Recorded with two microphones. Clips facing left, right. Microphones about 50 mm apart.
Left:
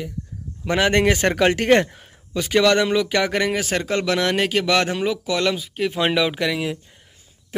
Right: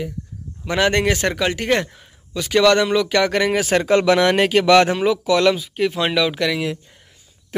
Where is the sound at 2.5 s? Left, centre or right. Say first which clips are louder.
Right 2 dB; centre.